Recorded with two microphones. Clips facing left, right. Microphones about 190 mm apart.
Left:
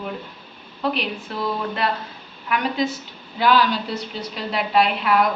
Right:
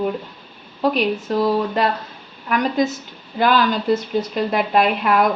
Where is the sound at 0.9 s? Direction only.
40° right (ahead or behind).